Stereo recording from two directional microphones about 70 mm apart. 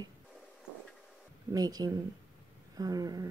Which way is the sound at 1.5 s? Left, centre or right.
Right.